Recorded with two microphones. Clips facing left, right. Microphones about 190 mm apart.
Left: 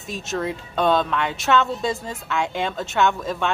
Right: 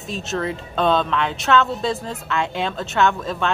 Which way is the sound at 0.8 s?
10° left (ahead or behind).